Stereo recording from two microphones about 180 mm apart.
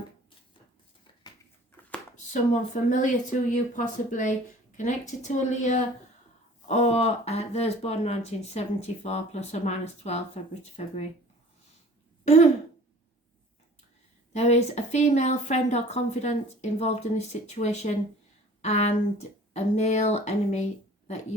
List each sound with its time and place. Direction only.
2.3 s speech: 45° left (ahead or behind)
12.2 s throat clearing: 35° left (ahead or behind)
14.3 s speech: 40° left (ahead or behind)